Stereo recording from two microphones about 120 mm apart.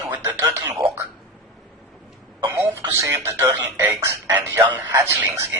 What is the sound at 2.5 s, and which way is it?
Speech, 30° right (ahead or behind).